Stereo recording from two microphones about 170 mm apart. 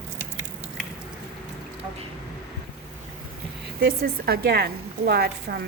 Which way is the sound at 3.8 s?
60° right (ahead or behind).